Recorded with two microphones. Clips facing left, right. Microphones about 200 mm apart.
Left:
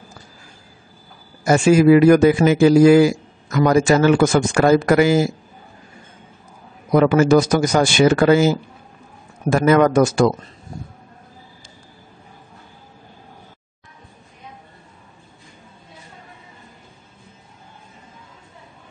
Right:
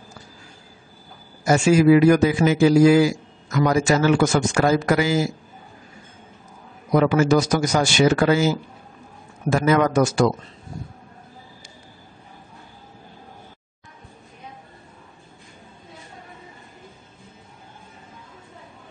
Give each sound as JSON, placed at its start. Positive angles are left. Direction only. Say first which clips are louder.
{"t": 1.4, "sound": "a man's voice", "louder": "left 3 dB", "side_deg": 55}
{"t": 6.9, "sound": "a man's voice", "louder": "left 4 dB", "side_deg": 55}